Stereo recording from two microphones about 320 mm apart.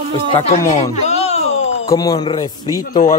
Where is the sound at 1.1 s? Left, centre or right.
Centre.